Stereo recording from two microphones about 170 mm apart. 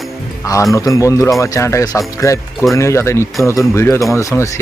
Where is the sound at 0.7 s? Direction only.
20° left (ahead or behind).